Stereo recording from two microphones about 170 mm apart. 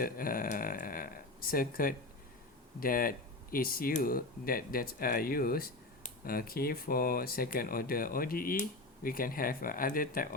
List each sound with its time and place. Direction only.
0.0 s speech: 55° left (ahead or behind)